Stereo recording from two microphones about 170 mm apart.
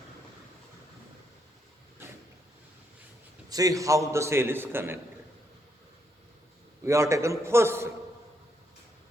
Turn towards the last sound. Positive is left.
turn(degrees=-15)  # may be behind; listen again after turning